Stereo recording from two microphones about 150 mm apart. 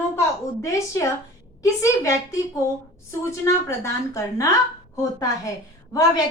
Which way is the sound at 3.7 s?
20° left (ahead or behind).